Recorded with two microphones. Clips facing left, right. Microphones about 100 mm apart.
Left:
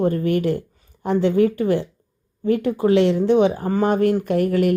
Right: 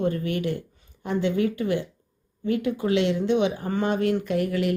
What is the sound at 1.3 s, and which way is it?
Speech, 40° left (ahead or behind).